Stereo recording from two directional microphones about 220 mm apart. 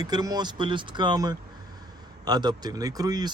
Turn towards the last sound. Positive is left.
turn(degrees=-15)  # may be behind; listen again after turning